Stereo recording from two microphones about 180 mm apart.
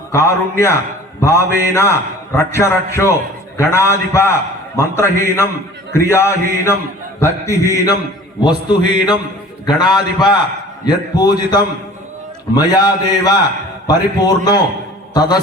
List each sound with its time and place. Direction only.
0.1 s a man's voice: 15° left (ahead or behind)